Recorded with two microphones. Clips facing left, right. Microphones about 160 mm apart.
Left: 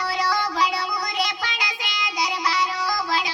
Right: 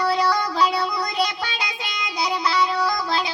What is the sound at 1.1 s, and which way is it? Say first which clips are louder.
Music: right 3 dB; 30° right (ahead or behind).